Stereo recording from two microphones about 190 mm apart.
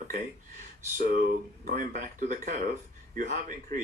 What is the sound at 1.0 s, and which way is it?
Speech, 45° right (ahead or behind).